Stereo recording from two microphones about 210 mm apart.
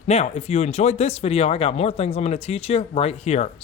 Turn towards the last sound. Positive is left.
turn(degrees=30)  # may be behind; listen again after turning